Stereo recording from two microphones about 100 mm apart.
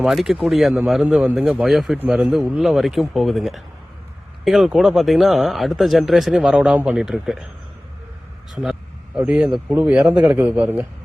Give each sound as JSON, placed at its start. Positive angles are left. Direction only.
{"t": 0.0, "sound": "speech", "side_deg": -5}
{"t": 2.6, "sound": "speech", "side_deg": 0}
{"t": 9.1, "sound": "speech", "side_deg": -15}